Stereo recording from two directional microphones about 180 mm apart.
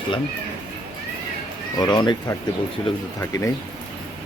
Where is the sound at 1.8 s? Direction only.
25° left (ahead or behind).